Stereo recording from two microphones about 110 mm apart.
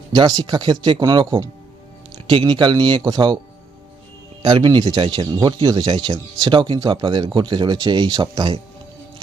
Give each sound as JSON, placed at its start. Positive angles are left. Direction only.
{"t": 0.1, "sound": "speech", "side_deg": -40}
{"t": 4.6, "sound": "speech", "side_deg": -40}